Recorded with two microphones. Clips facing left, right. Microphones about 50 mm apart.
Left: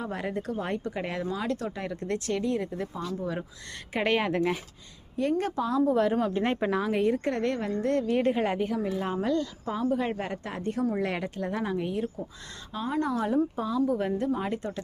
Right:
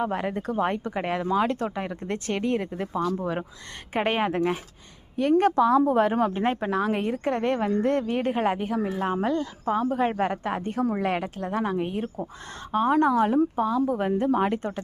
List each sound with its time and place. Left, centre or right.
0.1 s a woman's voice: right
0.6 s speech: right
1.7 s speech: right
2.4 s speech: right
3.1 s a woman's voice: right
3.9 s speech: right
5.4 s a woman's voice: right
6.0 s speech: right
6.4 s speech: centre
6.8 s a woman's voice: right
7.5 s a woman's voice: right
12.0 s speech: right
13.6 s speech: right
14.3 s speech: right